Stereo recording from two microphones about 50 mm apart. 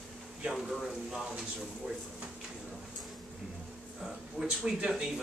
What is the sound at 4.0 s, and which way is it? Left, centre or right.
A man's voice, centre.